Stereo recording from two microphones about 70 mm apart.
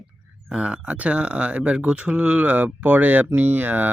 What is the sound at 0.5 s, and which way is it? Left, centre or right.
Speech, centre.